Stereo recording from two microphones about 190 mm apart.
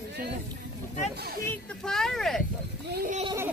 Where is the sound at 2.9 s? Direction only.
45° right (ahead or behind).